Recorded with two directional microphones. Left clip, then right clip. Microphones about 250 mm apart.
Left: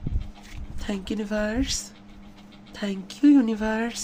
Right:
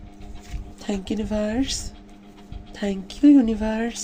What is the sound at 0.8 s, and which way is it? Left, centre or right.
Speech, centre.